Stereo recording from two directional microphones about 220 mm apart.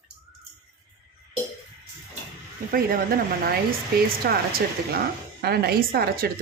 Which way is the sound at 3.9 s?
45° right (ahead or behind).